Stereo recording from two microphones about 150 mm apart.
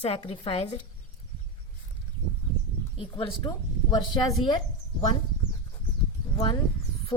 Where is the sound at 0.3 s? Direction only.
40° left (ahead or behind).